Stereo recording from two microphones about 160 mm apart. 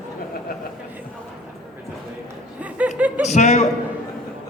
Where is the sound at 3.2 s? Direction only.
45° left (ahead or behind).